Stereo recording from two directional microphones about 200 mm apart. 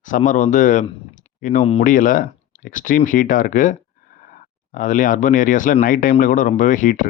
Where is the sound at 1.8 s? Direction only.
40° left (ahead or behind).